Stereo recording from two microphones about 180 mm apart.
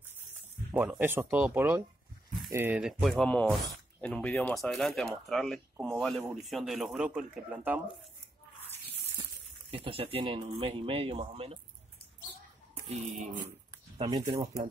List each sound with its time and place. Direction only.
0.7 s speech: 10° right (ahead or behind)
2.8 s speech: centre (ahead or behind)
9.1 s speech: 30° right (ahead or behind)
12.8 s dog: 40° right (ahead or behind)
13.7 s a sound: 25° right (ahead or behind)